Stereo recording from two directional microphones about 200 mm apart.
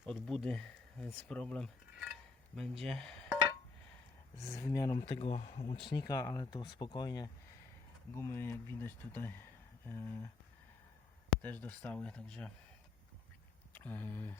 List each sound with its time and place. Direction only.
0.0 s speech: 5° left (ahead or behind)
4.4 s speech: 15° left (ahead or behind)
5.0 s speech: 30° left (ahead or behind); by 10.2 s 15° left (ahead or behind)
11.4 s speech: 10° left (ahead or behind)
13.7 s speech: 10° left (ahead or behind)